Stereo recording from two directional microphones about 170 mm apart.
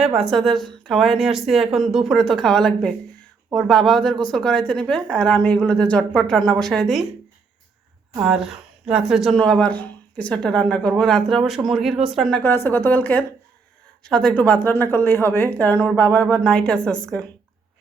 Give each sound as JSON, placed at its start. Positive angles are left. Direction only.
{"t": 0.0, "sound": "speech", "side_deg": 0}
{"t": 8.2, "sound": "a woman's voice", "side_deg": -5}